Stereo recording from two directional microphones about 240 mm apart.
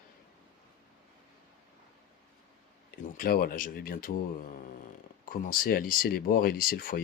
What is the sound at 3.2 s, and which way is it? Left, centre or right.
Speech, left.